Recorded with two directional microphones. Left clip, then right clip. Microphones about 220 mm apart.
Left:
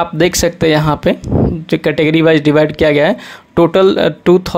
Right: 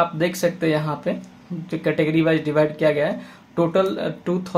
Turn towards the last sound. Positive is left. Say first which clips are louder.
# left 15 dB
turn(degrees=40)  # may be behind; listen again after turning